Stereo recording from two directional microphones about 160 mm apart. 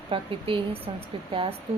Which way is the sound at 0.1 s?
35° right (ahead or behind).